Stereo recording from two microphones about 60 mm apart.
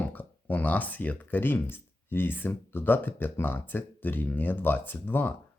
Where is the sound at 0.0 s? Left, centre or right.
Left.